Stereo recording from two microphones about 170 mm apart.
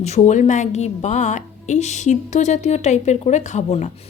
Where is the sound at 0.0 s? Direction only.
45° left (ahead or behind).